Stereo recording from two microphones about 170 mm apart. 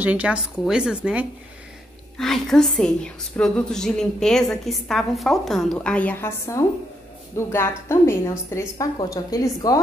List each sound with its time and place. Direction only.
0.0 s a woman's voice: 10° right (ahead or behind); by 9.8 s 20° left (ahead or behind)